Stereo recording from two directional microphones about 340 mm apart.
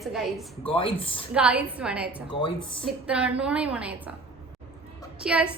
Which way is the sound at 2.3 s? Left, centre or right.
Centre.